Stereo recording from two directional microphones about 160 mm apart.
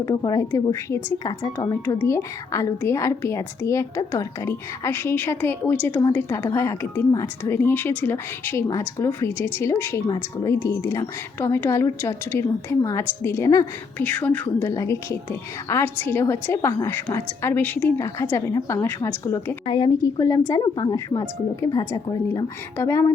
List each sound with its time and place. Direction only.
0.0 s a woman's voice: 25° left (ahead or behind)
19.6 s a woman's voice: 25° left (ahead or behind)